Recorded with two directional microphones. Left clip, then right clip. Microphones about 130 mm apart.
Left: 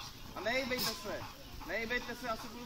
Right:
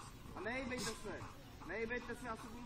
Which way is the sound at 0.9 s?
25° left (ahead or behind).